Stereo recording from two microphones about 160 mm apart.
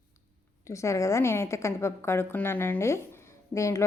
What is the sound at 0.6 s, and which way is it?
A woman's voice, 20° left (ahead or behind).